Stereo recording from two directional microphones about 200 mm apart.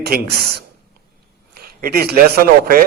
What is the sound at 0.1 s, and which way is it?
Speech, 50° right (ahead or behind).